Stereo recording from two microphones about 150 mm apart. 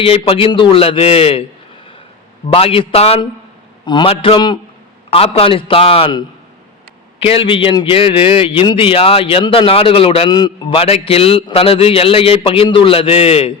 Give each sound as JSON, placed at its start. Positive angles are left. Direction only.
{"t": 0.0, "sound": "a man's voice", "side_deg": 40}
{"t": 2.5, "sound": "a man's voice", "side_deg": 40}
{"t": 10.8, "sound": "a man's voice", "side_deg": 40}